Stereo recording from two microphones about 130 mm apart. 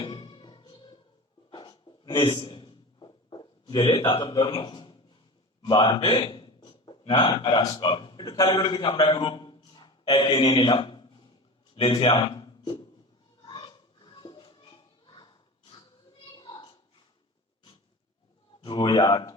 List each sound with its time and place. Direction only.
0.0 s music: 40° left (ahead or behind)
1.5 s a sound: 35° left (ahead or behind)
5.6 s a man's voice: 40° left (ahead or behind)
13.4 s music: 35° left (ahead or behind)
16.3 s a sound: 35° left (ahead or behind)
18.6 s speech: 35° left (ahead or behind)